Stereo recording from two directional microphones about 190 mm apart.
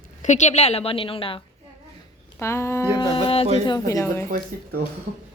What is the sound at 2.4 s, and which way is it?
Speech, 15° left (ahead or behind).